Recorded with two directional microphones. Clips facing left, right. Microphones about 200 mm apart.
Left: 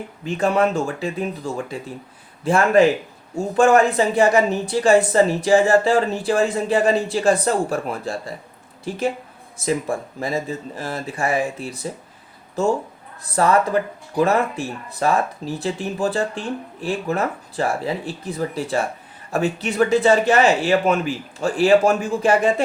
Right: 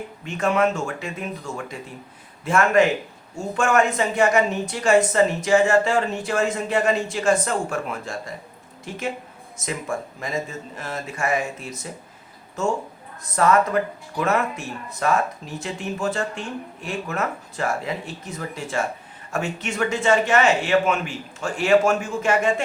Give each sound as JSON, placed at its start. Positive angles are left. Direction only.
{"t": 0.3, "sound": "speech", "side_deg": 35}